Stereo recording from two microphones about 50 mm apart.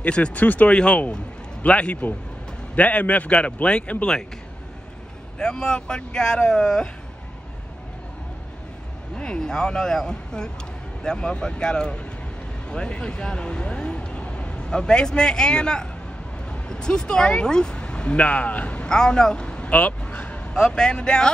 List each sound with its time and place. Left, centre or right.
0.0 s speech: left
0.4 s speech: left
0.7 s speech: centre
5.4 s speech: centre
9.1 s speech: centre
18.2 s speech: left
18.8 s speech: centre